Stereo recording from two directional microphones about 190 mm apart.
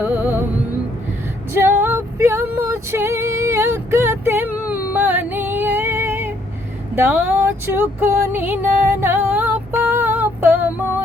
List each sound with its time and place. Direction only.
0.0 s music: 10° right (ahead or behind)
1.5 s female singing: 10° right (ahead or behind)
6.9 s a sound: 10° right (ahead or behind)